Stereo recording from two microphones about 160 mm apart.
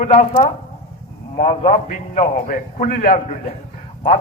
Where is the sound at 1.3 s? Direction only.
45° left (ahead or behind).